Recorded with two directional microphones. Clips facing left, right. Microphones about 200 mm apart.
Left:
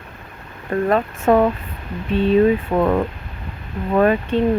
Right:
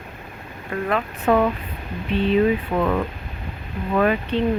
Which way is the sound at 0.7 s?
40° left (ahead or behind).